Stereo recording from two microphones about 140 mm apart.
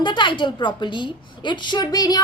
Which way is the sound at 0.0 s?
35° left (ahead or behind).